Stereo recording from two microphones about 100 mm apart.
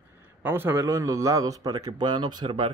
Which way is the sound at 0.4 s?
20° right (ahead or behind).